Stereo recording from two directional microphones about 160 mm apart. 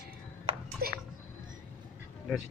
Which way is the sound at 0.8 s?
70° right (ahead or behind).